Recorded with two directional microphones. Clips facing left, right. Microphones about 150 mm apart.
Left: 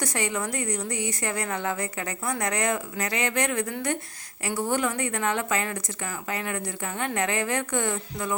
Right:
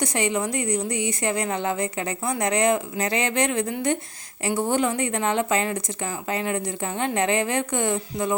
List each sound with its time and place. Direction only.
0.0 s a woman's voice: 20° right (ahead or behind)